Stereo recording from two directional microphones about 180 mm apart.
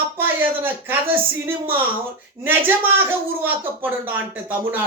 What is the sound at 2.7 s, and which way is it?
Speech, 10° right (ahead or behind).